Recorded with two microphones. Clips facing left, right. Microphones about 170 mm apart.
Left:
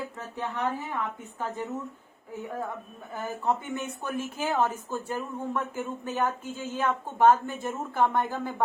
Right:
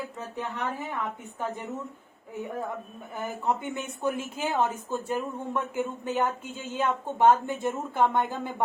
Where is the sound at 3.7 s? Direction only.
20° right (ahead or behind).